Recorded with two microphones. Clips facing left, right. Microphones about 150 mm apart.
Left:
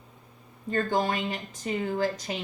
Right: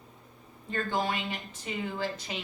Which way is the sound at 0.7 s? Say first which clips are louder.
Left 4 dB; 45° left (ahead or behind).